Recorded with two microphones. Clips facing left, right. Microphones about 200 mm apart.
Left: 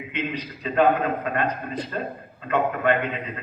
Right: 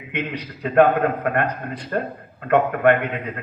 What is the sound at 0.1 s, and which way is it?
A man's voice, 65° right (ahead or behind).